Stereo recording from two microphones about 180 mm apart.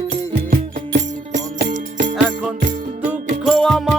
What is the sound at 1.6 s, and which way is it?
Music, 45° right (ahead or behind).